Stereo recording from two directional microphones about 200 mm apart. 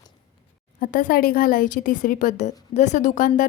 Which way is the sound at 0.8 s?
45° left (ahead or behind).